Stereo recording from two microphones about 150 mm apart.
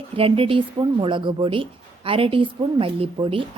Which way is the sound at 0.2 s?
40° right (ahead or behind).